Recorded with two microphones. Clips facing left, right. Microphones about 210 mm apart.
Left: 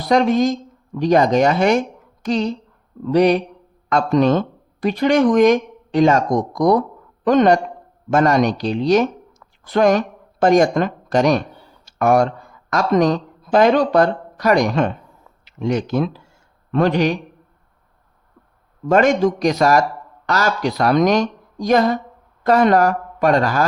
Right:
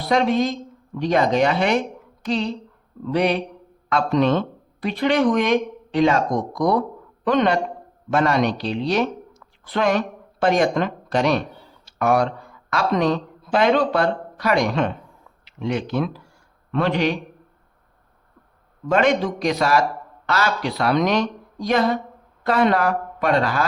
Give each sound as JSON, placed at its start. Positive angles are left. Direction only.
{"t": 0.0, "sound": "a man's voice", "side_deg": 45}
{"t": 18.9, "sound": "speech", "side_deg": 45}